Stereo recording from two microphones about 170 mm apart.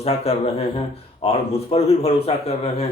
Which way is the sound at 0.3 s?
35° left (ahead or behind).